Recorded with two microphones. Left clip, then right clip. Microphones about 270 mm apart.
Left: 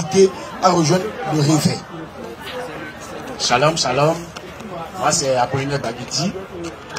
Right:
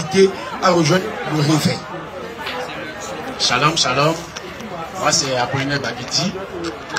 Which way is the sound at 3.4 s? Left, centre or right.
Left.